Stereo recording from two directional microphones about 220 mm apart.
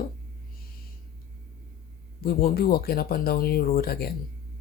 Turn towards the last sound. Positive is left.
turn(degrees=45)  # may be behind; listen again after turning